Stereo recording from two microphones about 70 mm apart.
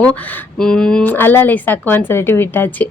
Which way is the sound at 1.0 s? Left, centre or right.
Left.